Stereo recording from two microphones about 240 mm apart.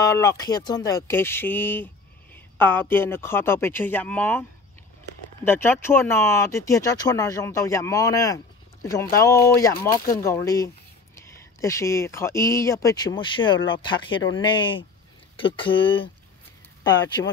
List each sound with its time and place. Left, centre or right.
0.0 s speech: centre